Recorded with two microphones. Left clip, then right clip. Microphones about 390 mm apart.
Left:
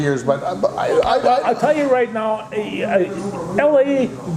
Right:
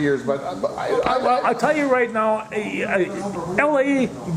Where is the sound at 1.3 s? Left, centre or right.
Right.